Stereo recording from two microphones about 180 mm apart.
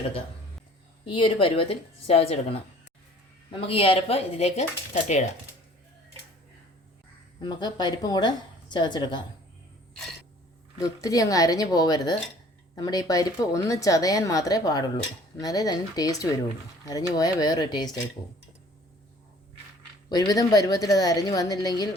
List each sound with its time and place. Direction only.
1.0 s speech: 25° left (ahead or behind)
7.3 s a woman's voice: 25° left (ahead or behind)
10.8 s a woman's voice: 20° left (ahead or behind)
20.1 s a woman's voice: 20° left (ahead or behind)